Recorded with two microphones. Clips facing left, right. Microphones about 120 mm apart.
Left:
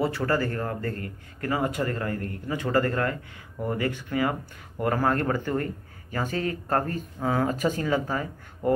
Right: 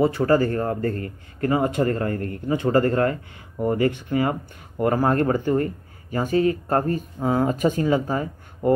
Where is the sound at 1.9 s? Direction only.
40° right (ahead or behind).